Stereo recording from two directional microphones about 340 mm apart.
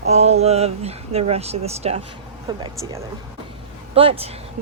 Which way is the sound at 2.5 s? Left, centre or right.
Centre.